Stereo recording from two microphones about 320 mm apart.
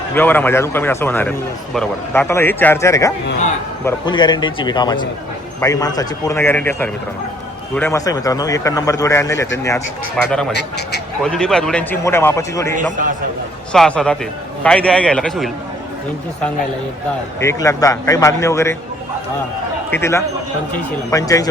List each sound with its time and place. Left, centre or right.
0.1 s a man's voice: centre
10.5 s speech: left
11.2 s a man's voice: centre
12.7 s a man's voice: right
13.7 s a man's voice: centre
17.4 s a man's voice: centre
19.9 s a man's voice: centre